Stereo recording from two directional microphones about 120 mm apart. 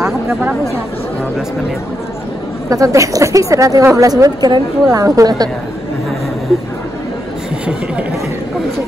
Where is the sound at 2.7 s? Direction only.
25° right (ahead or behind).